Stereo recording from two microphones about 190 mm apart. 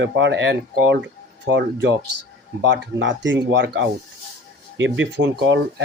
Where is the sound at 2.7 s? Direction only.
75° right (ahead or behind).